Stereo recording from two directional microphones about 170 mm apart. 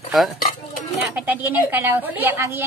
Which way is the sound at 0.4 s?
50° left (ahead or behind).